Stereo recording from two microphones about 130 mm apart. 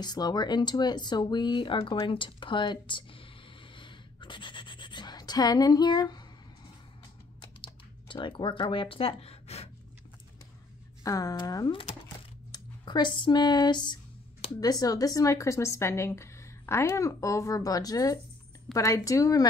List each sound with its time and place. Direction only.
0.0 s speech: 30° left (ahead or behind)
3.7 s a sound: 40° left (ahead or behind)
7.6 s speech: 40° left (ahead or behind)
11.1 s speech: 25° left (ahead or behind)